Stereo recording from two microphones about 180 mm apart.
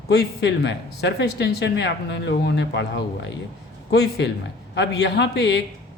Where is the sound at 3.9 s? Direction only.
65° left (ahead or behind).